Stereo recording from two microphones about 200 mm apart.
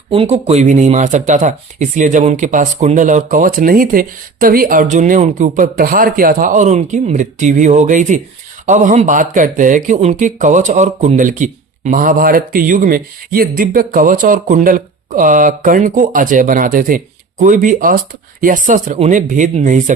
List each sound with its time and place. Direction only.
0.1 s speech: 30° right (ahead or behind)